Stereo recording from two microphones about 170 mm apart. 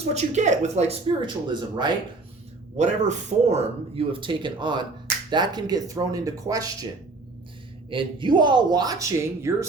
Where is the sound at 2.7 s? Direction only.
45° right (ahead or behind); by 6.9 s 20° right (ahead or behind).